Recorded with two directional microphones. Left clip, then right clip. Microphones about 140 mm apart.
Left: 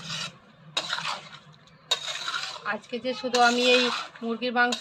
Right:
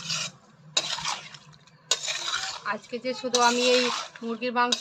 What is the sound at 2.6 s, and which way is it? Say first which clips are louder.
Speech: even; centre (ahead or behind).